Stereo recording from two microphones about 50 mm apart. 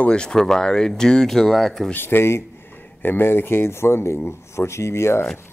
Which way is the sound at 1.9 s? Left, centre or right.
Left.